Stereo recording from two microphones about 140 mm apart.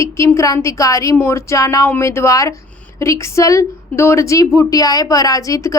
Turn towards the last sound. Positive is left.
turn(degrees=20)  # may be behind; listen again after turning